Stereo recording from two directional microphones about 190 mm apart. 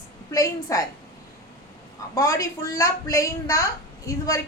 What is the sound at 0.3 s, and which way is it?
Speech, 20° left (ahead or behind).